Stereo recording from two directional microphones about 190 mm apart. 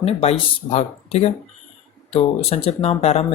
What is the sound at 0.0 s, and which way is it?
Speech, 30° left (ahead or behind).